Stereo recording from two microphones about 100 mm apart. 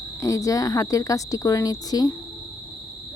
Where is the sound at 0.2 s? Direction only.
35° left (ahead or behind).